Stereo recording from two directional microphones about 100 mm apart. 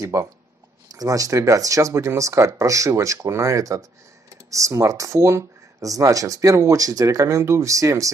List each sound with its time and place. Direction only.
0.0 s speech: 30° right (ahead or behind)